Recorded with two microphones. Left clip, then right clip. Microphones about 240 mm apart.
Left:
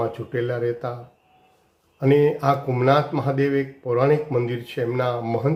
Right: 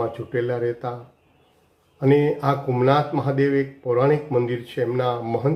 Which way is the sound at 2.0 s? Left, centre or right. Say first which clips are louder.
Left 1 dB; centre.